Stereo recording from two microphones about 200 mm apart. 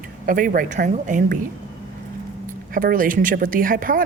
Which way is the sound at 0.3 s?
45° right (ahead or behind).